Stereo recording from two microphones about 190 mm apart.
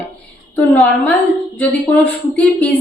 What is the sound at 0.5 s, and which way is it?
Speech, 5° left (ahead or behind).